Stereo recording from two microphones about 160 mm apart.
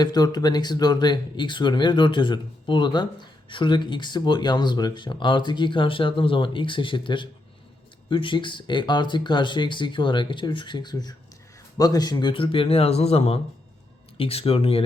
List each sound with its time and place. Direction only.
0.0 s speech: 25° left (ahead or behind)